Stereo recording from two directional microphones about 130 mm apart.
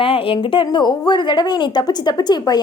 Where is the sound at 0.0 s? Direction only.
45° left (ahead or behind).